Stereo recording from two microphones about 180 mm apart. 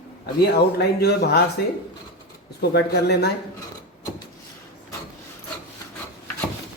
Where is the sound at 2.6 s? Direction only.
65° left (ahead or behind).